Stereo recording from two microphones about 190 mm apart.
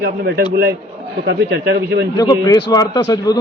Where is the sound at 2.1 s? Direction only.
20° left (ahead or behind).